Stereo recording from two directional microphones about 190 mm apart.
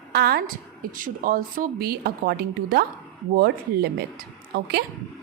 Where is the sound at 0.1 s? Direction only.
55° right (ahead or behind).